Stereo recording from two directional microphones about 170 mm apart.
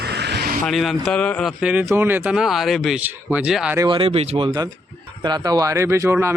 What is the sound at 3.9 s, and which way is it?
Speech, 35° right (ahead or behind).